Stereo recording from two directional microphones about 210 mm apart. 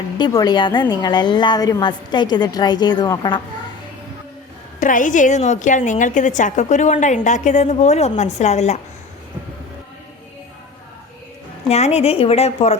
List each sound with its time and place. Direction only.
0.2 s a woman's voice: 20° left (ahead or behind)
4.8 s a woman's voice: 40° left (ahead or behind)
11.7 s a woman's voice: 30° left (ahead or behind)